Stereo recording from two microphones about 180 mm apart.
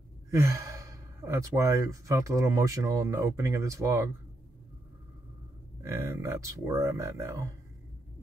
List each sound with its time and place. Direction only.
0.3 s speech: 15° right (ahead or behind)
5.8 s speech: 15° right (ahead or behind)